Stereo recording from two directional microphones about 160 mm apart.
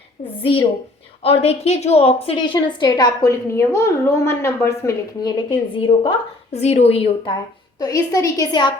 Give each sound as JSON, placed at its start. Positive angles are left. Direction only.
{"t": 1.2, "sound": "a woman's voice", "side_deg": 40}
{"t": 5.7, "sound": "a woman's voice", "side_deg": 35}
{"t": 7.8, "sound": "a woman's voice", "side_deg": 20}